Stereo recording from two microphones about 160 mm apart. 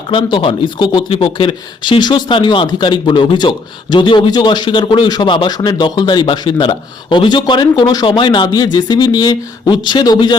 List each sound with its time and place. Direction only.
0.1 s speech: 30° left (ahead or behind)